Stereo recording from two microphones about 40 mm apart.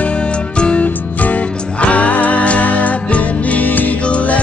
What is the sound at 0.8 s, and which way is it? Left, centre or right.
Music, left.